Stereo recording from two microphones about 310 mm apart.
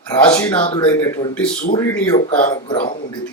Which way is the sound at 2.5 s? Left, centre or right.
Left.